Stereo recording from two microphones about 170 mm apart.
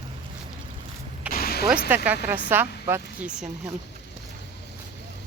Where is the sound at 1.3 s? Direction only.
65° left (ahead or behind).